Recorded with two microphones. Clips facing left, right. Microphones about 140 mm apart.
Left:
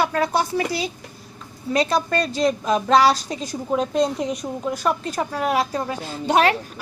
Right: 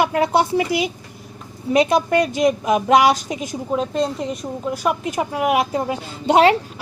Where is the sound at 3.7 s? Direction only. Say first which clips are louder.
Left 1 dB; centre (ahead or behind).